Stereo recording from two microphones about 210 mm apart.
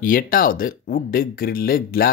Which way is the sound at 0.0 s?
40° left (ahead or behind).